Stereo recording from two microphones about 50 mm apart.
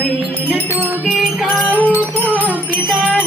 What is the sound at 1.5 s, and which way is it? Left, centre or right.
Music, left.